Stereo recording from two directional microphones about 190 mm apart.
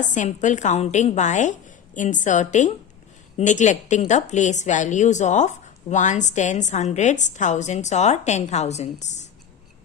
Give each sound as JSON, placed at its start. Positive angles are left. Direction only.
{"t": 0.0, "sound": "a woman's voice", "side_deg": 40}